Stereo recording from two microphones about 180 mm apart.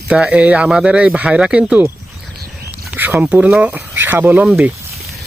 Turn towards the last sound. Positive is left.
turn(degrees=-5)  # may be behind; listen again after turning